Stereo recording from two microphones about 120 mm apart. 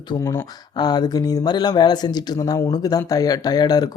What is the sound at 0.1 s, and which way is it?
Speech, 45° left (ahead or behind).